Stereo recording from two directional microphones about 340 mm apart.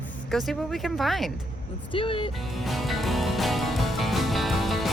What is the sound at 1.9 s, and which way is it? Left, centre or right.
Speech, centre.